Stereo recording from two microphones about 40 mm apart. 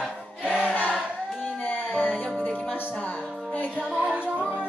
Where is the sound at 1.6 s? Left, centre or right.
Left.